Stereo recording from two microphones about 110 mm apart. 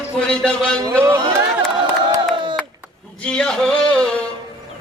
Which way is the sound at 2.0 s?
45° right (ahead or behind).